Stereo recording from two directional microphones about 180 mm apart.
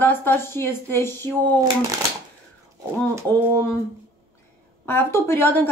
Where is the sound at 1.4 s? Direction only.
20° right (ahead or behind).